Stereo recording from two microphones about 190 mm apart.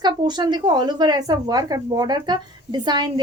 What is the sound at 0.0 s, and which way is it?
Speech, 20° right (ahead or behind).